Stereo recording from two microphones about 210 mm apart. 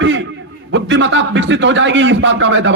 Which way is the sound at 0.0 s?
60° right (ahead or behind).